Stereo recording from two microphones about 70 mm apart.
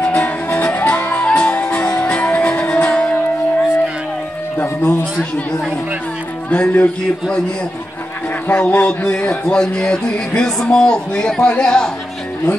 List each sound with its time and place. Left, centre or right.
0.0 s music: centre
4.6 s music: left
6.5 s a man's voice: left
8.5 s a man's voice: left